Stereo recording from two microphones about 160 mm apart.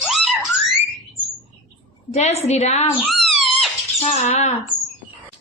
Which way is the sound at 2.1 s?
45° left (ahead or behind).